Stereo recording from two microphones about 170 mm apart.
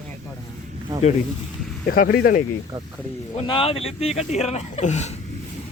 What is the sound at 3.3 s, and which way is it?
Speech, 30° left (ahead or behind).